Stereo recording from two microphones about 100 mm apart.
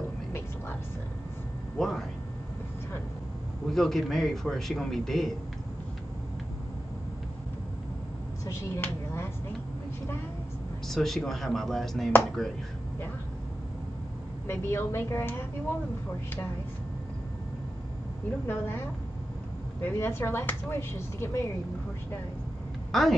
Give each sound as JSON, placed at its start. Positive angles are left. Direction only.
{"t": 1.8, "sound": "a man's voice", "side_deg": 0}
{"t": 3.7, "sound": "a man's voice", "side_deg": 5}
{"t": 8.5, "sound": "speech", "side_deg": 25}
{"t": 10.9, "sound": "a man's voice", "side_deg": 5}
{"t": 14.5, "sound": "speech", "side_deg": 25}
{"t": 18.5, "sound": "speech", "side_deg": 20}
{"t": 22.8, "sound": "speech", "side_deg": 0}